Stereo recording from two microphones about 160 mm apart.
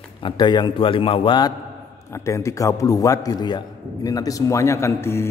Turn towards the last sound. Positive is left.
turn(degrees=15)  # may be behind; listen again after turning